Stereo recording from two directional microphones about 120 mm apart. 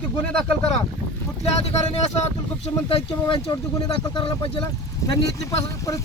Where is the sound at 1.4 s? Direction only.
60° left (ahead or behind).